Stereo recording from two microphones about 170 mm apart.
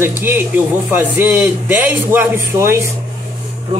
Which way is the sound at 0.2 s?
10° right (ahead or behind).